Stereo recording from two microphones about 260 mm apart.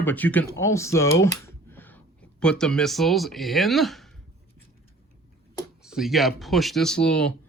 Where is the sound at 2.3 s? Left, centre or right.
Centre.